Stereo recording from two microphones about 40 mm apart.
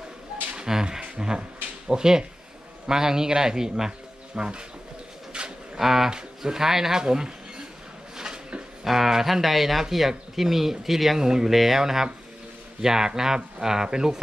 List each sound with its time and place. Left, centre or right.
0.6 s a sound: centre
1.9 s speech: centre
5.3 s livestock: right
5.8 s speech: centre
8.2 s a sound: right
8.8 s speech: centre
11.5 s speech: centre